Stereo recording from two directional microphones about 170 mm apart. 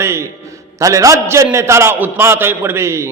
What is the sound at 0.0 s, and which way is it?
A man's voice, 15° right (ahead or behind).